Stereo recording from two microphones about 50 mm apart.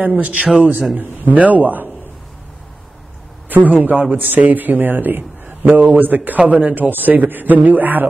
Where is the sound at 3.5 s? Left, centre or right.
Right.